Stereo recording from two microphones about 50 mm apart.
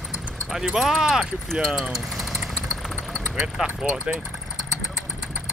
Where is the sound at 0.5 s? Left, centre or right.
Centre.